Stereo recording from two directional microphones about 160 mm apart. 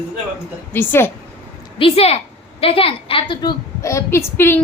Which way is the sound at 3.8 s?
20° left (ahead or behind).